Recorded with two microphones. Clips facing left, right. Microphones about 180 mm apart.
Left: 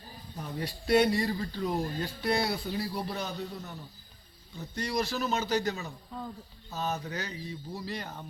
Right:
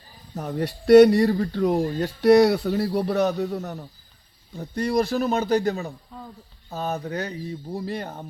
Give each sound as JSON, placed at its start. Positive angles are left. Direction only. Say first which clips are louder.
{"t": 0.3, "sound": "a man's voice", "louder": "right 9 dB", "side_deg": -70}
{"t": 4.5, "sound": "a man's voice", "louder": "right 9 dB", "side_deg": -55}